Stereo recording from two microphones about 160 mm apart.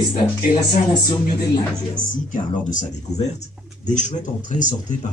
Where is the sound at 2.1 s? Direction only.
55° left (ahead or behind).